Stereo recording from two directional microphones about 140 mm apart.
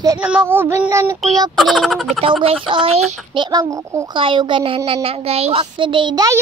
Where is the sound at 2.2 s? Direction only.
40° right (ahead or behind); by 6.4 s 25° right (ahead or behind).